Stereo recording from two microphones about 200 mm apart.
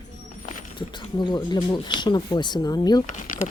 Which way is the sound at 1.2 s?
20° left (ahead or behind).